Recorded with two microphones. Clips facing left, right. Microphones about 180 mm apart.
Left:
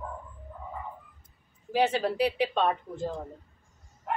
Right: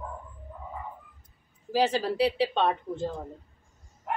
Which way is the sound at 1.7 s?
30° right (ahead or behind).